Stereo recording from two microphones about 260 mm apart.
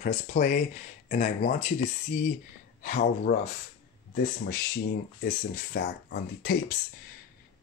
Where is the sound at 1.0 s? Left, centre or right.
Left.